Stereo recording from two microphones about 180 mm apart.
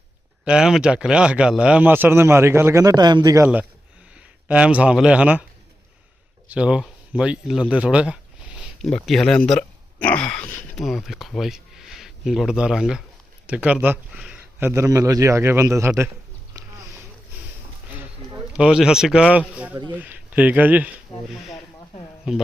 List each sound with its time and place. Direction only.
0.4 s speech: 5° right (ahead or behind); by 3.4 s 20° right (ahead or behind)
3.4 s speech: 10° right (ahead or behind)
6.5 s speech: 5° right (ahead or behind)
18.5 s speech: 5° right (ahead or behind)